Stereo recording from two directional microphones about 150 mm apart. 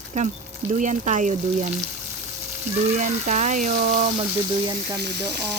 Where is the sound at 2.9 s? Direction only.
55° right (ahead or behind).